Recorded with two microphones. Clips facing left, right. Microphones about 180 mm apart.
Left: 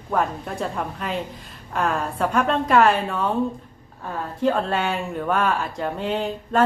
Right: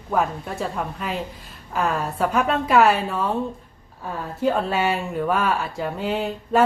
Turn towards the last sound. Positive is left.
turn(degrees=-5)  # may be behind; listen again after turning